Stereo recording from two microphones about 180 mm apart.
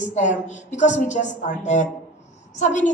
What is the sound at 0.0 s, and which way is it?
A woman's voice, 40° left (ahead or behind).